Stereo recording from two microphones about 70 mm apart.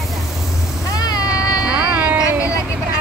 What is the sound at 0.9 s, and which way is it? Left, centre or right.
Cat, left.